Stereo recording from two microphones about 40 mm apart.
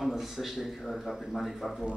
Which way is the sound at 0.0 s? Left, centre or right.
Centre.